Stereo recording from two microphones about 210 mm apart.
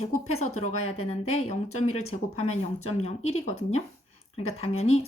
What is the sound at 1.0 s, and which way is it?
Speech, 30° left (ahead or behind).